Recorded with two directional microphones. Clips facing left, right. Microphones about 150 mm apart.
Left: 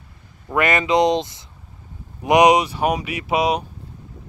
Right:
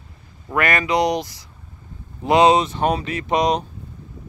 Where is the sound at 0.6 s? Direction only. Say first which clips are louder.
Left 2 dB; 20° left (ahead or behind).